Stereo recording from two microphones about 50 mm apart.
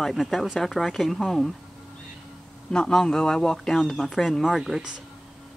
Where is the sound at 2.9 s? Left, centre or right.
Centre.